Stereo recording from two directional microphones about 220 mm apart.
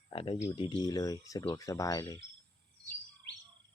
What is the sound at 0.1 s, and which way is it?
Cricket, 25° left (ahead or behind).